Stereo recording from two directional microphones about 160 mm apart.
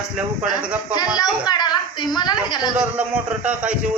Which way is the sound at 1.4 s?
25° left (ahead or behind).